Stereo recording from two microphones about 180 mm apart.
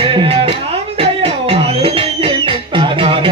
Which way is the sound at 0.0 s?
30° right (ahead or behind).